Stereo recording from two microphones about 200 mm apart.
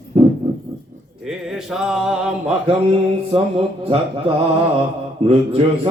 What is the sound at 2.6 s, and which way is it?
Mantra, 30° right (ahead or behind).